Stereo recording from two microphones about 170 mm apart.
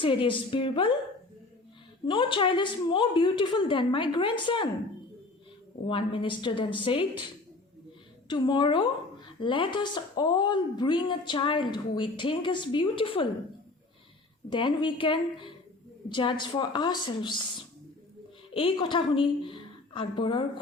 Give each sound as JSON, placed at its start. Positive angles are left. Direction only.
{"t": 0.0, "sound": "speech", "side_deg": 30}
{"t": 2.0, "sound": "a woman's voice", "side_deg": 30}
{"t": 5.9, "sound": "speech", "side_deg": 30}
{"t": 8.3, "sound": "a woman's voice", "side_deg": 25}
{"t": 14.5, "sound": "a woman's voice", "side_deg": 30}
{"t": 18.5, "sound": "a woman's voice", "side_deg": 30}